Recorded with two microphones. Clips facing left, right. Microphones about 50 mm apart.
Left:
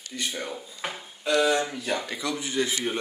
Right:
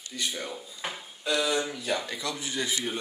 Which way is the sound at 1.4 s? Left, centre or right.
Left.